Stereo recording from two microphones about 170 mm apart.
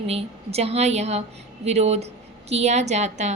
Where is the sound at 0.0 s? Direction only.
35° right (ahead or behind).